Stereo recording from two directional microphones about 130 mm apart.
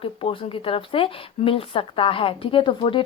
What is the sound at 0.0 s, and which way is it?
Speech, 45° left (ahead or behind).